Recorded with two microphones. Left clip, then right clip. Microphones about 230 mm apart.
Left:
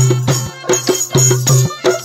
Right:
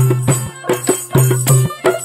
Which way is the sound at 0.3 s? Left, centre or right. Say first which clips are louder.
Left 2 dB; left.